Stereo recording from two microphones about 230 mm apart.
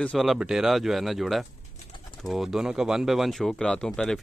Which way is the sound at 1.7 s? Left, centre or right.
Left.